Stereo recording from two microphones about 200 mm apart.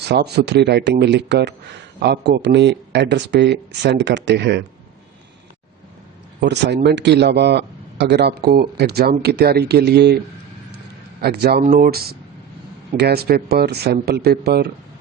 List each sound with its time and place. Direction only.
0.1 s speech: 55° right (ahead or behind)
6.4 s speech: 60° right (ahead or behind)
11.2 s speech: 55° right (ahead or behind)